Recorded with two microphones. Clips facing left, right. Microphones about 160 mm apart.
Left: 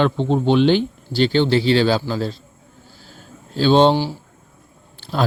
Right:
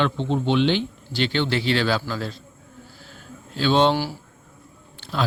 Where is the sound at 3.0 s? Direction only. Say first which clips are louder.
Left 3 dB; 35° left (ahead or behind).